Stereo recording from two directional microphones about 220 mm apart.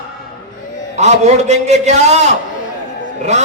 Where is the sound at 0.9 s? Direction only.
30° right (ahead or behind).